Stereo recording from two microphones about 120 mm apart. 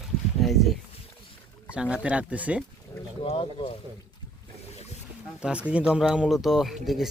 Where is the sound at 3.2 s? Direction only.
50° left (ahead or behind).